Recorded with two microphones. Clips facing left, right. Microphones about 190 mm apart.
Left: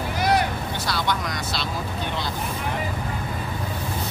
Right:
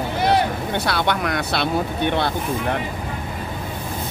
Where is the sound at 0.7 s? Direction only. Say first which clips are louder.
Right 5 dB; 60° right (ahead or behind).